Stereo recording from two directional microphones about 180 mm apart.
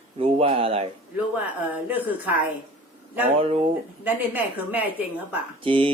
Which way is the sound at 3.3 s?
35° right (ahead or behind).